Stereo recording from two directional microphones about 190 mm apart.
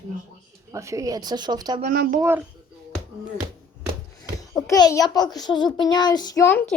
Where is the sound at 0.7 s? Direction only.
15° right (ahead or behind).